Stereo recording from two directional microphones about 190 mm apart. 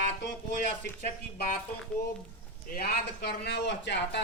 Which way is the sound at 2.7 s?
55° left (ahead or behind).